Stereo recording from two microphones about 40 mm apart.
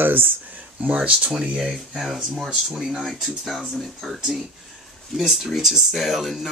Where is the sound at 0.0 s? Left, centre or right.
Right.